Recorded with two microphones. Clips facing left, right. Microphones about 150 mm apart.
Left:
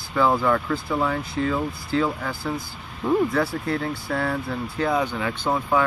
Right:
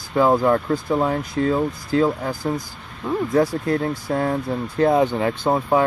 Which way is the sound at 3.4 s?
40° right (ahead or behind).